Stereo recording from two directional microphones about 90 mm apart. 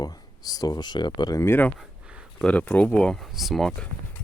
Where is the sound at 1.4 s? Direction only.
20° left (ahead or behind); by 3.8 s 5° left (ahead or behind).